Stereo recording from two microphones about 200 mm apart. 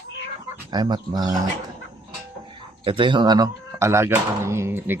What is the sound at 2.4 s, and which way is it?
Speech, 25° right (ahead or behind).